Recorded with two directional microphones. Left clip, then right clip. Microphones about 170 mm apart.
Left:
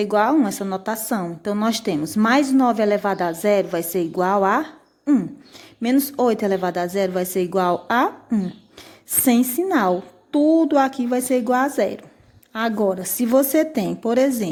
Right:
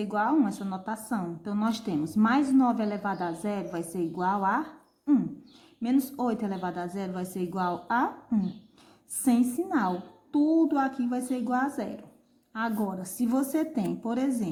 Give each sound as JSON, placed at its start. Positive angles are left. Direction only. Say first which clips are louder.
{"t": 0.0, "sound": "a woman's voice", "louder": "left 9 dB", "side_deg": 35}
{"t": 5.8, "sound": "a woman's voice", "louder": "left 9 dB", "side_deg": 35}
{"t": 9.2, "sound": "a woman's voice", "louder": "left 8 dB", "side_deg": 35}